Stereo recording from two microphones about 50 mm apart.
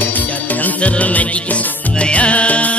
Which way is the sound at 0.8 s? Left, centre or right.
Left.